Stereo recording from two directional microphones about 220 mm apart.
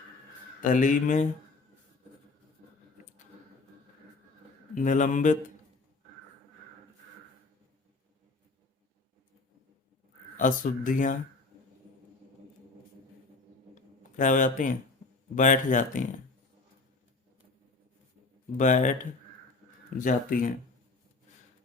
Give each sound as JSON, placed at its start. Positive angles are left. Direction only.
{"t": 0.6, "sound": "speech", "side_deg": 35}
{"t": 4.7, "sound": "speech", "side_deg": 35}
{"t": 10.3, "sound": "speech", "side_deg": 35}
{"t": 13.7, "sound": "a sound", "side_deg": 35}
{"t": 15.4, "sound": "speech", "side_deg": 35}
{"t": 18.5, "sound": "speech", "side_deg": 35}
{"t": 20.0, "sound": "speech", "side_deg": 35}